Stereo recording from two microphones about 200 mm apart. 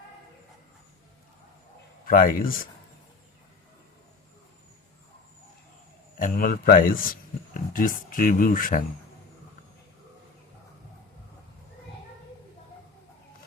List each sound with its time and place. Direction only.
2.0 s a man's voice: 45° left (ahead or behind)
6.1 s a man's voice: 45° left (ahead or behind)